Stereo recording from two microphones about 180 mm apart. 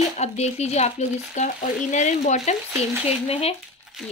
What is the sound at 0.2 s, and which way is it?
Speech, 35° left (ahead or behind).